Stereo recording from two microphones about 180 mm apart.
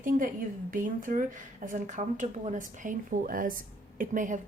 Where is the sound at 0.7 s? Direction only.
50° right (ahead or behind).